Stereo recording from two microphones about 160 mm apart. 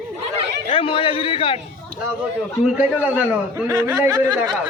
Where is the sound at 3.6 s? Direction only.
20° right (ahead or behind).